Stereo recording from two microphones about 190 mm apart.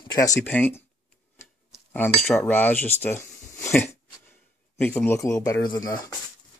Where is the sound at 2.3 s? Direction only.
10° left (ahead or behind).